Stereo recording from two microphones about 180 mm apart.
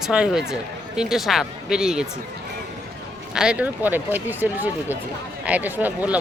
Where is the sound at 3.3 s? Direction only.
5° right (ahead or behind).